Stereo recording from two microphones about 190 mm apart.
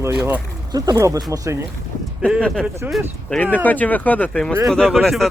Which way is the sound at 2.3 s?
5° left (ahead or behind).